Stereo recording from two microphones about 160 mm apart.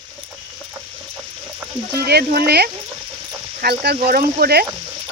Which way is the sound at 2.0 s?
75° right (ahead or behind).